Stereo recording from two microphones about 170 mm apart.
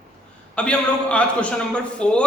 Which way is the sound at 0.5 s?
5° left (ahead or behind).